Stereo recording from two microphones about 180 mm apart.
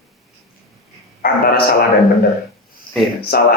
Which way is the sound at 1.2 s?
55° left (ahead or behind).